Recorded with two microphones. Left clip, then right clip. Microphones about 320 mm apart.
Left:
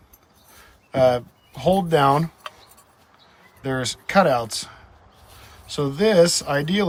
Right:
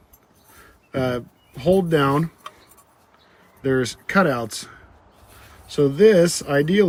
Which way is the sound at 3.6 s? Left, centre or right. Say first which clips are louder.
Right 4 dB; centre.